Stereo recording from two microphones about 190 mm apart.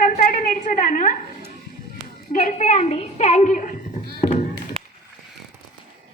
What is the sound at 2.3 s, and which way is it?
Speech, 40° left (ahead or behind).